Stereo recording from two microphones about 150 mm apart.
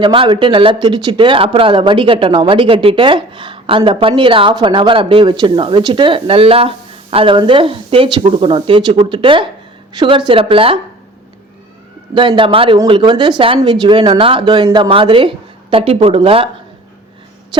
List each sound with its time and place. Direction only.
0.0 s speech: 35° right (ahead or behind)
12.4 s speech: 35° right (ahead or behind)
17.5 s a sound: 30° right (ahead or behind)